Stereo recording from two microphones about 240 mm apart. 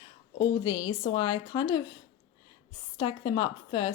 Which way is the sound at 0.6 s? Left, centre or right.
Left.